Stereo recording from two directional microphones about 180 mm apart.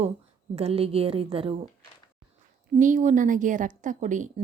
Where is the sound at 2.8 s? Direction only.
45° right (ahead or behind).